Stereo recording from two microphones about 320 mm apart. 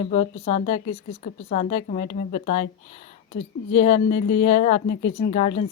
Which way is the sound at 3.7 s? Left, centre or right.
Left.